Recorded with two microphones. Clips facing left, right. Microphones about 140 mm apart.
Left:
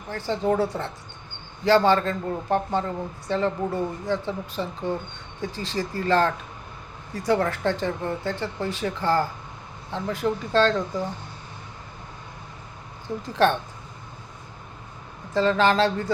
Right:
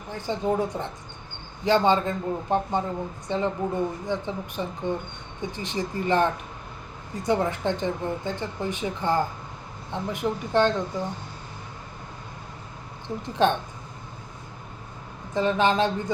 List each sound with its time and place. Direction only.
0.1 s speech: 15° right (ahead or behind)
13.2 s speech: 20° right (ahead or behind)
15.3 s speech: 20° right (ahead or behind)